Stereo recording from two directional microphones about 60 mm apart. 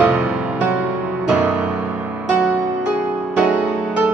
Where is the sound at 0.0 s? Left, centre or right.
Right.